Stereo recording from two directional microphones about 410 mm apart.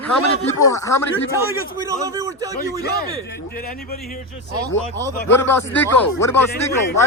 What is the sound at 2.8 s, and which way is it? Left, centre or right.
Speech, left.